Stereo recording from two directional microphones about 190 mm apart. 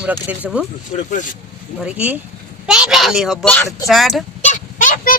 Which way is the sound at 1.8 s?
10° right (ahead or behind).